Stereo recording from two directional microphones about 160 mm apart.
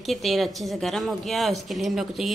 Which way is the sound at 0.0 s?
Centre (ahead or behind).